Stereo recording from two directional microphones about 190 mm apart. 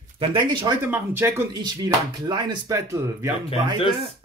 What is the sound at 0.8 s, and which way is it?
Speech, 10° right (ahead or behind).